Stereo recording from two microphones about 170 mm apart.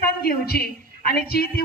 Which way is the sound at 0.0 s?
65° left (ahead or behind).